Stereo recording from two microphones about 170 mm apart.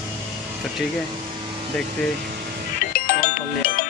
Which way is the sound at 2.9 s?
55° left (ahead or behind).